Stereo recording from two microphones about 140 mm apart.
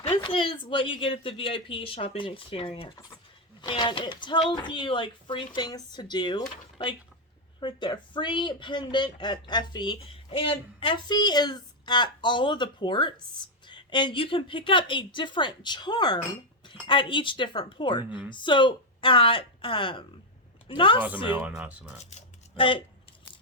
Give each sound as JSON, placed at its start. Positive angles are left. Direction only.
{"t": 0.0, "sound": "speech", "side_deg": 40}
{"t": 7.6, "sound": "speech", "side_deg": 35}
{"t": 21.2, "sound": "speech", "side_deg": -10}
{"t": 22.5, "sound": "speech", "side_deg": 40}